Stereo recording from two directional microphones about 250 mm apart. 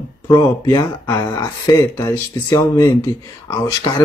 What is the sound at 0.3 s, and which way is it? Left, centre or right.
Speech, centre.